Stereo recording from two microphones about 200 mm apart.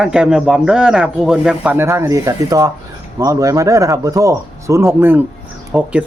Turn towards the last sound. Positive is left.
turn(degrees=-5)  # may be behind; listen again after turning